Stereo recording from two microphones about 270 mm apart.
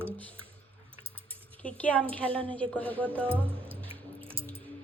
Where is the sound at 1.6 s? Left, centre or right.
Centre.